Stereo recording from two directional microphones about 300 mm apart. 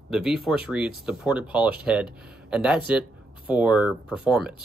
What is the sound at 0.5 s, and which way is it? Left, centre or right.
Speech, centre.